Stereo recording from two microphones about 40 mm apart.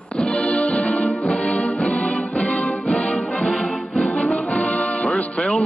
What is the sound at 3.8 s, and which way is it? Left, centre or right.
Music, left.